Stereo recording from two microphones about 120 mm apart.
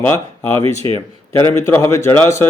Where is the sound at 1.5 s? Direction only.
25° left (ahead or behind).